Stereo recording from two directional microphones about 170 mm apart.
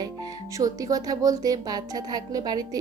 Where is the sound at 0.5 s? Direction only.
20° right (ahead or behind).